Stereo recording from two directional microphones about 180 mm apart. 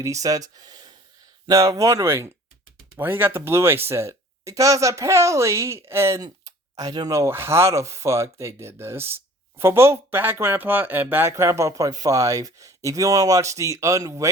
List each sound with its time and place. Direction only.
0.0 s speech: 20° right (ahead or behind)